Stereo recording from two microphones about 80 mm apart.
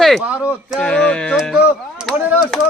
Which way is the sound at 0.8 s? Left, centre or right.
Centre.